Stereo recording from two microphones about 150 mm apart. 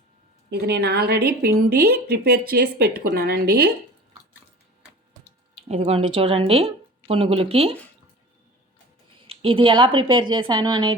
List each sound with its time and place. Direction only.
0.5 s a woman's voice: 90° right
5.6 s speech: 45° right (ahead or behind)
9.2 s speech: 35° right (ahead or behind)